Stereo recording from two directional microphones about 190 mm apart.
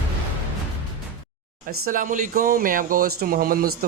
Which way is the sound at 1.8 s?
45° right (ahead or behind).